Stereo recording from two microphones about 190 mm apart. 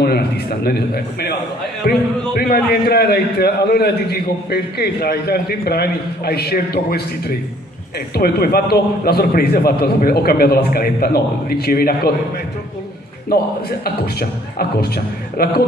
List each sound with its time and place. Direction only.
0.7 s a man's voice: 55° left (ahead or behind)
13.3 s a man's voice: 55° left (ahead or behind)
15.3 s speech: 55° left (ahead or behind)